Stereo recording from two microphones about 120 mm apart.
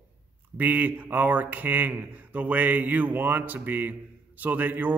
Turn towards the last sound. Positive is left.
turn(degrees=-15)  # may be behind; listen again after turning